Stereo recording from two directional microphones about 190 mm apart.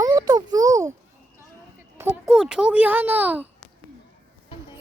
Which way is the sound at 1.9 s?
10° right (ahead or behind).